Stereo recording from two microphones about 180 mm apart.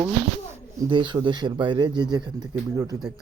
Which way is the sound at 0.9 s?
25° right (ahead or behind).